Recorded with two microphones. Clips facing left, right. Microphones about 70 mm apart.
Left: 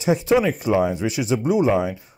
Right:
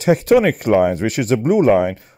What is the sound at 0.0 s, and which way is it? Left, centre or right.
Speech, right.